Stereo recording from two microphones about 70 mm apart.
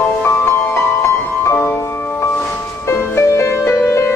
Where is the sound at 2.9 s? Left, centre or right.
Left.